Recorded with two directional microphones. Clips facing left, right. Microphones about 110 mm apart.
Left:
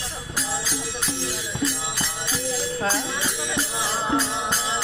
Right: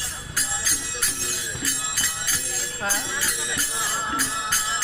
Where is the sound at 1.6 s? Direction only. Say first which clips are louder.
Left 8 dB; 25° left (ahead or behind).